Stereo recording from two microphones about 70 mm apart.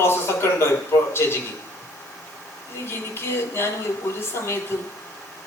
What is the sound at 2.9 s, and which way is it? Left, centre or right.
Speech, left.